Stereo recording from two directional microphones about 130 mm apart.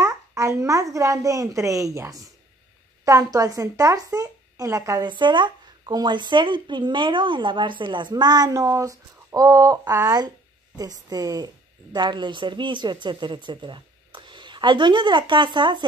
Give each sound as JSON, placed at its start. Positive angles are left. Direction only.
{"t": 0.0, "sound": "a woman's voice", "side_deg": -20}
{"t": 5.0, "sound": "a woman's voice", "side_deg": -35}